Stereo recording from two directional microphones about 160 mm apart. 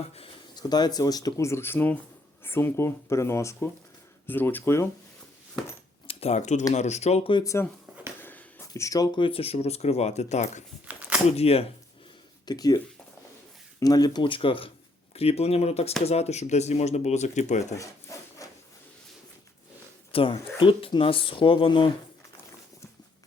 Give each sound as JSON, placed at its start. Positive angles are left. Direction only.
{"t": 0.5, "sound": "speech", "side_deg": 25}
{"t": 6.1, "sound": "speech", "side_deg": 40}
{"t": 7.3, "sound": "speech", "side_deg": 20}
{"t": 10.8, "sound": "a sound", "side_deg": -10}
{"t": 11.3, "sound": "speech", "side_deg": 40}
{"t": 12.5, "sound": "speech", "side_deg": 25}
{"t": 18.1, "sound": "rub", "side_deg": 20}
{"t": 20.1, "sound": "speech", "side_deg": 35}